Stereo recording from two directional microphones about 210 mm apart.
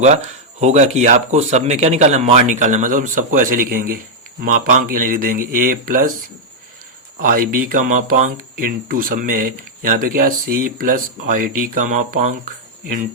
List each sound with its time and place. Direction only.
0.6 s speech: 35° right (ahead or behind)
7.2 s speech: 40° right (ahead or behind)